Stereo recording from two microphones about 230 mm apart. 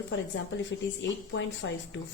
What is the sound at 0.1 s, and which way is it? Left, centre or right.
A woman's voice, left.